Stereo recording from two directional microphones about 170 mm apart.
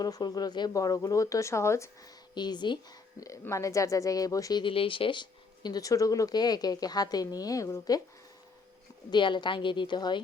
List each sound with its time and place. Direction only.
0.0 s a woman's voice: 20° left (ahead or behind)
9.0 s a woman's voice: 25° left (ahead or behind)